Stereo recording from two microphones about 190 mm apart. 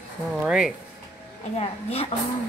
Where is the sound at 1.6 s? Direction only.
30° left (ahead or behind).